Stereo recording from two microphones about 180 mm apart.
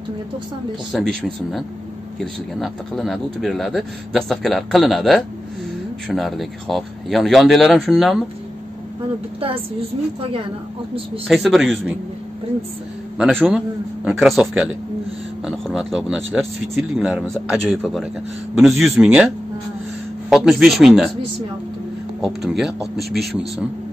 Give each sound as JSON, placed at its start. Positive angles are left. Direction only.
{"t": 0.9, "sound": "speech", "side_deg": 0}
{"t": 9.4, "sound": "a woman's voice", "side_deg": -30}
{"t": 11.2, "sound": "speech", "side_deg": 0}
{"t": 13.2, "sound": "speech", "side_deg": 5}
{"t": 22.2, "sound": "speech", "side_deg": 0}